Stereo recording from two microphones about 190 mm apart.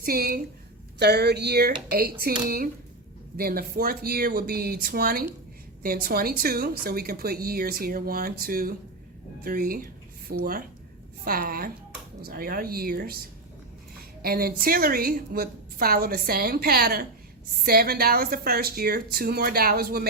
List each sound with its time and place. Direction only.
0.0 s a woman's voice: 50° right (ahead or behind)
3.3 s a woman's voice: 50° right (ahead or behind)
14.2 s a woman's voice: 50° right (ahead or behind)